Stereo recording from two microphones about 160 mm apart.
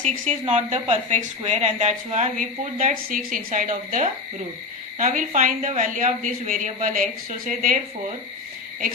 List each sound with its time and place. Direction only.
0.0 s speech: 45° right (ahead or behind)